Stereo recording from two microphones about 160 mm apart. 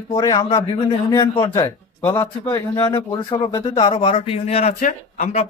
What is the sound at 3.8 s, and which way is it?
Speech, 35° left (ahead or behind).